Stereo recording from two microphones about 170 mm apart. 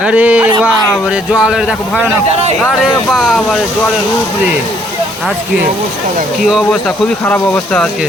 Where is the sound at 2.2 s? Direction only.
40° right (ahead or behind).